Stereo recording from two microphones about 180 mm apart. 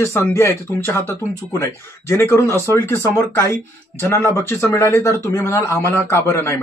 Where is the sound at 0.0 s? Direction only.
15° left (ahead or behind).